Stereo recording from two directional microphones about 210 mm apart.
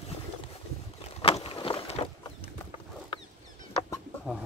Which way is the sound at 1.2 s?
25° left (ahead or behind).